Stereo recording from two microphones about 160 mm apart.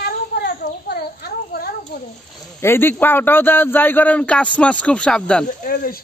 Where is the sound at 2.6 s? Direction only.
15° left (ahead or behind).